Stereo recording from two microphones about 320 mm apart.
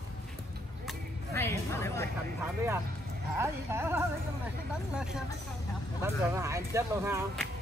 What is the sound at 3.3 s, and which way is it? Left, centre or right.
Speech, centre.